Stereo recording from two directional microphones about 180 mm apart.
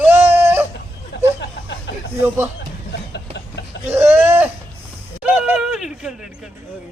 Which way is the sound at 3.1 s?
70° left (ahead or behind).